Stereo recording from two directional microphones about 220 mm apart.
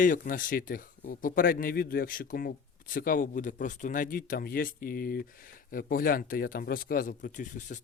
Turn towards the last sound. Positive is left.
turn(degrees=35)  # may be behind; listen again after turning